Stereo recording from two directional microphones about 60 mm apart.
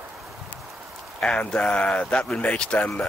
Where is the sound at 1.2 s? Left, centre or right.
Centre.